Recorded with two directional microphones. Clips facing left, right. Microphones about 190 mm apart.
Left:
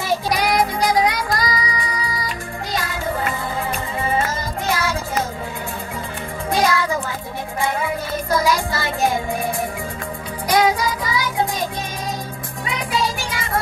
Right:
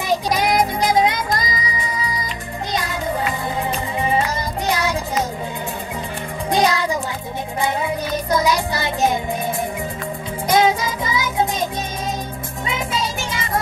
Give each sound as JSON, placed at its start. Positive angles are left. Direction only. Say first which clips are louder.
{"t": 0.3, "sound": "music", "louder": "even", "side_deg": -20}
{"t": 4.6, "sound": "music", "louder": "right 1 dB", "side_deg": -20}
{"t": 6.5, "sound": "music", "louder": "right 1 dB", "side_deg": -20}
{"t": 10.5, "sound": "music", "louder": "right 1 dB", "side_deg": -25}
{"t": 12.6, "sound": "music", "louder": "left 1 dB", "side_deg": -25}